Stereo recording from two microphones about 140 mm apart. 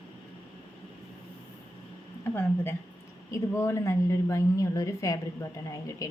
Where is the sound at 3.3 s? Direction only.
20° left (ahead or behind).